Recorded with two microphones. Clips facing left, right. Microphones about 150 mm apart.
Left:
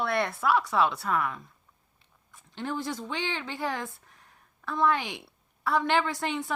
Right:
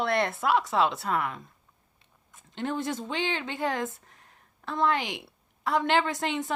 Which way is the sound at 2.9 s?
20° right (ahead or behind).